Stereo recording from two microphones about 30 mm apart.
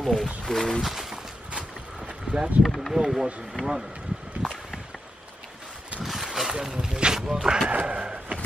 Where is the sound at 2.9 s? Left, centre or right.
Centre.